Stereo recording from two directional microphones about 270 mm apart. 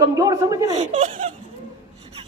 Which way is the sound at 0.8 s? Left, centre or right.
Right.